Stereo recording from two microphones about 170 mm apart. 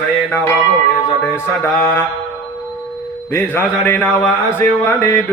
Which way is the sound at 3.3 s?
15° left (ahead or behind).